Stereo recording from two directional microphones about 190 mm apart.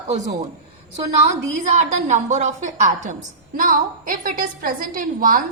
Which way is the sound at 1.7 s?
40° right (ahead or behind).